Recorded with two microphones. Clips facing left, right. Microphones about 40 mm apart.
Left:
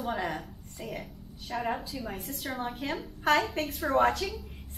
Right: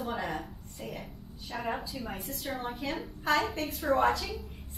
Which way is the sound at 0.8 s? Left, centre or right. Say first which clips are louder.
Left 2 dB; centre.